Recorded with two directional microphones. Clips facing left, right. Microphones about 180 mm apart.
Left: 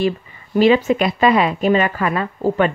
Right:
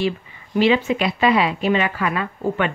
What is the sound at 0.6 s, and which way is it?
A woman's voice, 45° left (ahead or behind).